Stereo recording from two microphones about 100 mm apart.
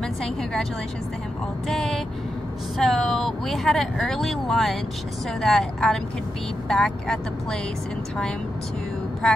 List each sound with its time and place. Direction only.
0.0 s a woman's voice: 5° left (ahead or behind)
1.7 s speech: 5° left (ahead or behind)
9.2 s speech: 5° left (ahead or behind)